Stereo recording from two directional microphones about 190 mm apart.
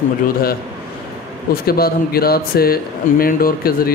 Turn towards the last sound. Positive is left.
turn(degrees=50)  # may be behind; listen again after turning